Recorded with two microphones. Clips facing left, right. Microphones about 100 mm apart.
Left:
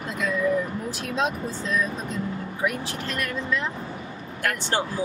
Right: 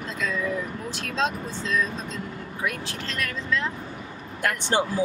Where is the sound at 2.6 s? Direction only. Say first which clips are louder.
Left 3 dB; 15° left (ahead or behind).